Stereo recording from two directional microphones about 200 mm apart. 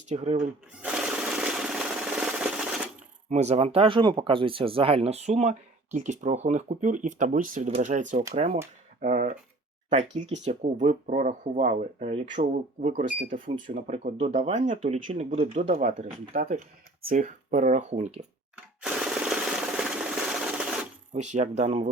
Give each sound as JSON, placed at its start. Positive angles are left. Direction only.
{"t": 0.1, "sound": "speech", "side_deg": -35}
{"t": 0.8, "sound": "jackhammer", "side_deg": -5}
{"t": 3.2, "sound": "speech", "side_deg": -35}
{"t": 12.9, "sound": "speech", "side_deg": -40}
{"t": 18.8, "sound": "rub", "side_deg": -5}
{"t": 21.1, "sound": "speech", "side_deg": -35}